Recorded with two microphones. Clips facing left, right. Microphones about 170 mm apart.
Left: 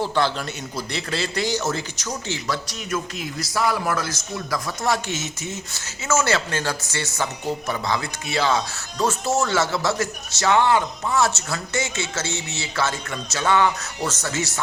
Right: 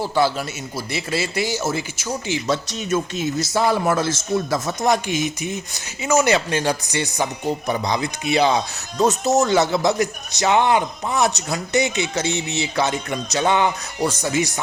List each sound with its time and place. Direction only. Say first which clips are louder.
0.0 s a man's voice: right 3 dB; 5° right (ahead or behind)